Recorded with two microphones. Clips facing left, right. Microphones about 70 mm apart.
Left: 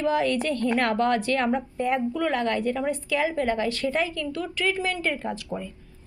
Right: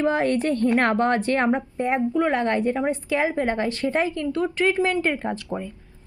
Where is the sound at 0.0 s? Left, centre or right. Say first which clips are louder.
Right 2 dB; right.